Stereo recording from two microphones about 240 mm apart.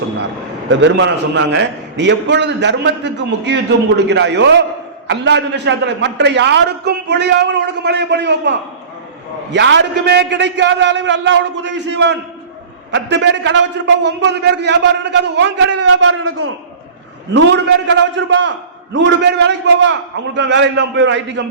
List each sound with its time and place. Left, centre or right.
0.7 s a man's voice: right
15.7 s a man's voice: right
17.3 s a man's voice: right